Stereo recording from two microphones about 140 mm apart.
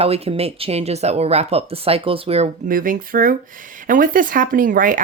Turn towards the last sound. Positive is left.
turn(degrees=-75)  # may be behind; listen again after turning